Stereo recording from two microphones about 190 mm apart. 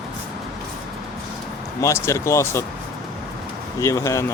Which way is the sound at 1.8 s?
15° left (ahead or behind).